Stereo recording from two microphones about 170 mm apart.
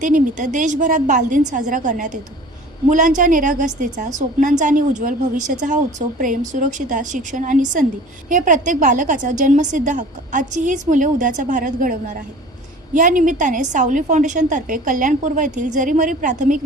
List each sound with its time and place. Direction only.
0.0 s a woman's voice: 50° right (ahead or behind)